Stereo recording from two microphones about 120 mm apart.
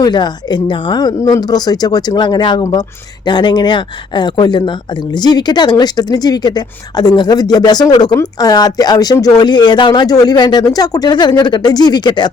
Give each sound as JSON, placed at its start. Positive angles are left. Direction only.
{"t": 0.0, "sound": "speech", "side_deg": 35}